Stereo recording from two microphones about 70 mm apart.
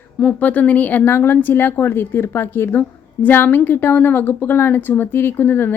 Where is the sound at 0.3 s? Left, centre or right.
Left.